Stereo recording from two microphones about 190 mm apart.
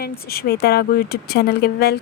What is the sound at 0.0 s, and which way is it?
A woman's voice, 55° left (ahead or behind).